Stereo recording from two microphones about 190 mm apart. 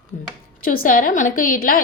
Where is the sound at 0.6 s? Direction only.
50° left (ahead or behind).